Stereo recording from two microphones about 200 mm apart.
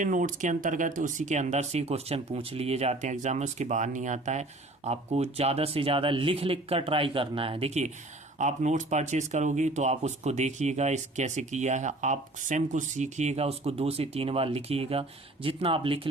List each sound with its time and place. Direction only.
0.0 s speech: 40° right (ahead or behind)